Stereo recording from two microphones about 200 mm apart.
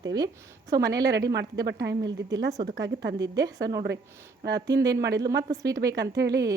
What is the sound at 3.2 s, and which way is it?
Speech, 20° right (ahead or behind).